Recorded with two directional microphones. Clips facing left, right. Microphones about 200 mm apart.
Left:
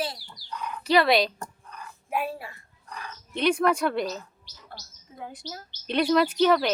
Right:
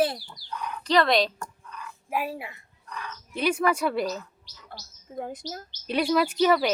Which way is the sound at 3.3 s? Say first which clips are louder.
Left 2 dB; 5° right (ahead or behind).